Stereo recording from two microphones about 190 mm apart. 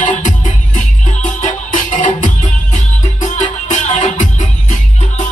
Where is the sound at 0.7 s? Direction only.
40° left (ahead or behind).